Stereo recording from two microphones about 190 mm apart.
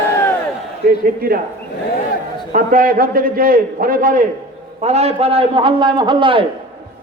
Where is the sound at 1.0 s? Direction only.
50° right (ahead or behind).